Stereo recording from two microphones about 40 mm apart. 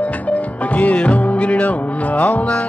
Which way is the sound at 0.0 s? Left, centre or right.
Left.